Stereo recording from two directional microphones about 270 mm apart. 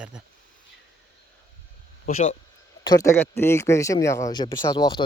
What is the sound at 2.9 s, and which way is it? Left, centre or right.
Speech, centre.